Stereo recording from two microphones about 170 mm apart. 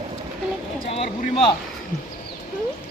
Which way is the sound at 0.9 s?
35° left (ahead or behind).